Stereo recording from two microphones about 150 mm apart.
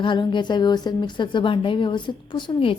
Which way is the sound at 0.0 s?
30° left (ahead or behind).